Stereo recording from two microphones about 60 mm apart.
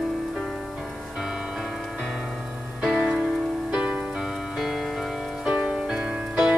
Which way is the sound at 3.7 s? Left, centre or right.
Centre.